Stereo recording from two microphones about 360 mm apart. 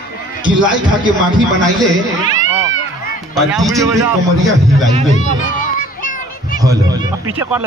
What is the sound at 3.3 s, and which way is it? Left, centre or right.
Speech, centre.